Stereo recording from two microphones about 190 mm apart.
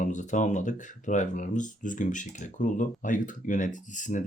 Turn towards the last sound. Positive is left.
turn(degrees=40)  # may be behind; listen again after turning